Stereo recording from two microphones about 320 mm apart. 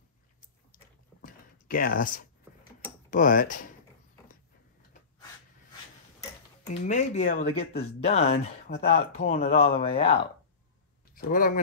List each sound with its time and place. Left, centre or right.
1.2 s a sound: left
3.1 s speech: left
6.7 s speech: left